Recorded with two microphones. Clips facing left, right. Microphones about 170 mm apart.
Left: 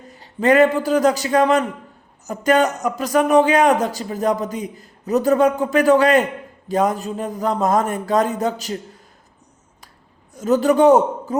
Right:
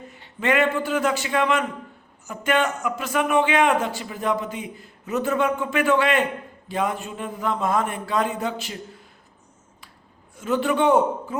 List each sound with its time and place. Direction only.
0.1 s a man's voice: 40° left (ahead or behind)
10.3 s a man's voice: 40° left (ahead or behind)